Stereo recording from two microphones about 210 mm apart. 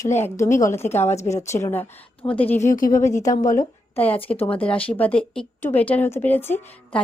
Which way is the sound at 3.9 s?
10° left (ahead or behind).